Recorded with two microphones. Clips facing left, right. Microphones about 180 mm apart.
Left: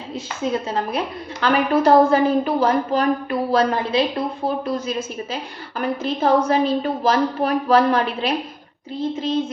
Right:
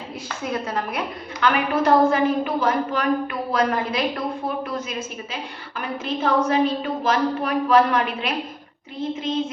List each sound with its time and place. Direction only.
0.4 s a woman's voice: 25° left (ahead or behind)